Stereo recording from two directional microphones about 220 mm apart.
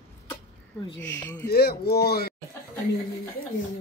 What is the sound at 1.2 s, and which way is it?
Speech, 10° left (ahead or behind).